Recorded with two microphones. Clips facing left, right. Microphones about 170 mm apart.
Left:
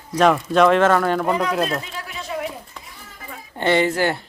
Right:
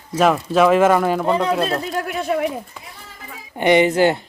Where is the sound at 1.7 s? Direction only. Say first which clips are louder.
Right 5 dB; 35° right (ahead or behind).